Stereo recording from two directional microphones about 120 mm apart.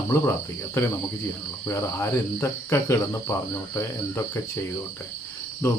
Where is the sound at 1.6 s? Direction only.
25° left (ahead or behind).